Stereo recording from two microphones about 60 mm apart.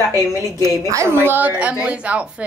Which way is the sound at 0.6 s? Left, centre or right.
Right.